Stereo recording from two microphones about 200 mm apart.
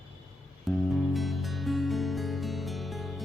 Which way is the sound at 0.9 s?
Centre (ahead or behind).